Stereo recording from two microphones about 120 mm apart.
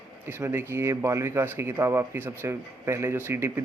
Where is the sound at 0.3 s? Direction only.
20° right (ahead or behind).